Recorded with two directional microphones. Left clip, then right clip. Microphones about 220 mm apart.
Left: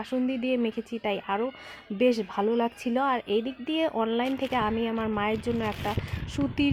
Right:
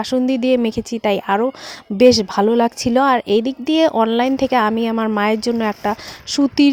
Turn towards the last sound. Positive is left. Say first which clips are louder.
# right 13 dB
turn(degrees=-40)  # may be behind; listen again after turning